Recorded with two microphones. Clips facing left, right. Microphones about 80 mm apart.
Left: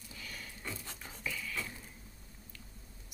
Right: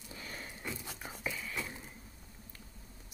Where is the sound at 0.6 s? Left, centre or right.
Centre.